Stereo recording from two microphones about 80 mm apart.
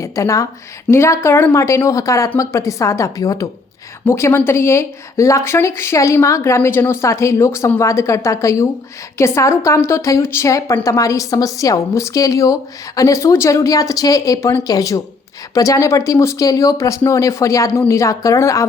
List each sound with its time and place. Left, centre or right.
0.0 s speech: left
4.0 s a woman's voice: left